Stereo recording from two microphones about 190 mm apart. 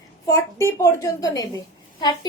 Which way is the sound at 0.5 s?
15° left (ahead or behind).